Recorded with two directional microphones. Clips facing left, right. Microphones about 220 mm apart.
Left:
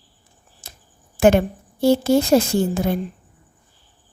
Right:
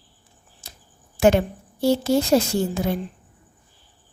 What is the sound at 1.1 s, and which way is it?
Speech, 50° left (ahead or behind).